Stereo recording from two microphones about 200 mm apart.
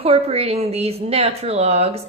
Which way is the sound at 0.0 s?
30° right (ahead or behind).